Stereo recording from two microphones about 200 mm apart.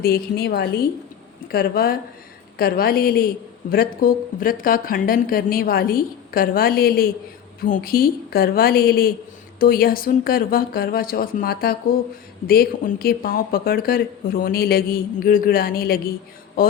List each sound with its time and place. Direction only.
0.0 s speech: 50° left (ahead or behind)